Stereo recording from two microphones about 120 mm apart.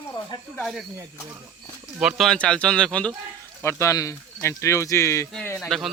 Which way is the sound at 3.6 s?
25° left (ahead or behind).